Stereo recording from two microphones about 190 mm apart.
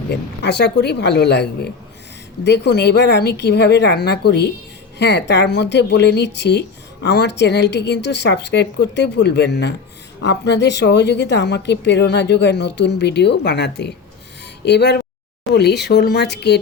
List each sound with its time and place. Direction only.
0.1 s speech: 60° left (ahead or behind)